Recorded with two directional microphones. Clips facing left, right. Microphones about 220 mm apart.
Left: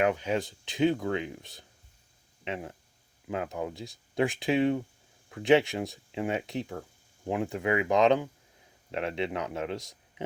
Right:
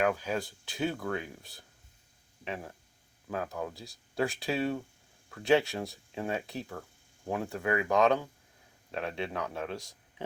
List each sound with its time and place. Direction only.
0.0 s speech: 20° left (ahead or behind)